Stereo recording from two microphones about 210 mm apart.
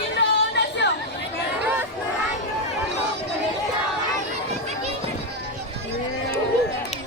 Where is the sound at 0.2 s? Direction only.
55° left (ahead or behind).